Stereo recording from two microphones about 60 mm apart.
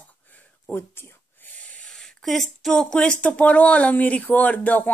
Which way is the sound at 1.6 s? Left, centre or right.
Left.